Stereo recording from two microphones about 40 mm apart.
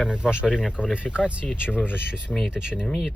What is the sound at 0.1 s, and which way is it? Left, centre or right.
Speech, right.